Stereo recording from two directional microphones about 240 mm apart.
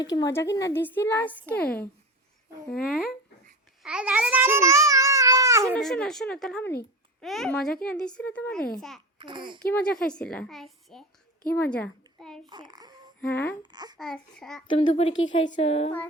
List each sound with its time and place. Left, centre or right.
0.0 s a woman's voice: centre
3.8 s babbling: centre
5.7 s a child's voice: centre
9.1 s a child's voice: centre
9.6 s a child's voice: centre
12.5 s a child's voice: centre
13.3 s a woman's voice: centre
13.7 s a child's voice: centre
14.0 s a child's voice: centre
14.7 s a woman's voice: left